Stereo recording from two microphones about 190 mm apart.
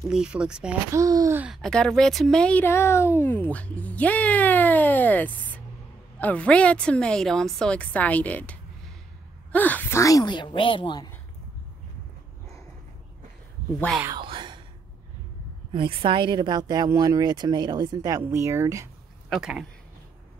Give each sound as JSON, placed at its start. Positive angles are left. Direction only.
{"t": 0.1, "sound": "speech", "side_deg": -5}
{"t": 0.9, "sound": "speech", "side_deg": -15}
{"t": 1.4, "sound": "a woman's voice", "side_deg": 0}
{"t": 14.1, "sound": "whispering", "side_deg": -25}
{"t": 15.7, "sound": "speech", "side_deg": -25}
{"t": 19.2, "sound": "speech", "side_deg": 0}